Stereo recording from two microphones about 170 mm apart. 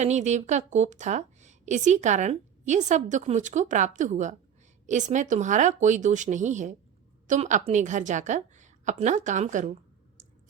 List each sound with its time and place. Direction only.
0.0 s a woman's voice: 45° right (ahead or behind)